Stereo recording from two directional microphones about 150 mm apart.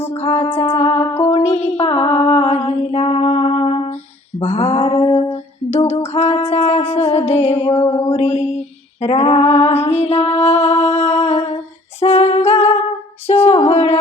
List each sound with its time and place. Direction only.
0.1 s music: 45° left (ahead or behind)
4.4 s female singing: 45° left (ahead or behind)
7.9 s a sound: 15° left (ahead or behind)
8.1 s female singing: 45° left (ahead or behind)